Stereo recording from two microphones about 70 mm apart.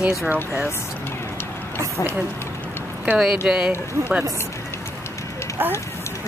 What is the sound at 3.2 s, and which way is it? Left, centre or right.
Speech, centre.